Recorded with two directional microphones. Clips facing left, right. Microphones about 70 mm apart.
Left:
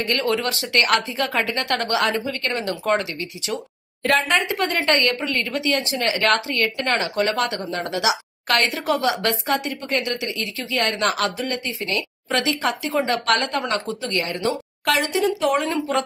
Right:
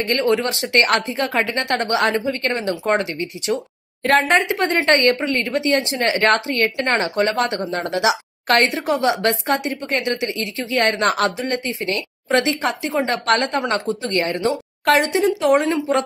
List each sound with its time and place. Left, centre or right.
0.0 s a woman's voice: right